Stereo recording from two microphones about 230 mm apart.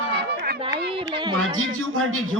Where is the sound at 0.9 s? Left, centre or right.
Right.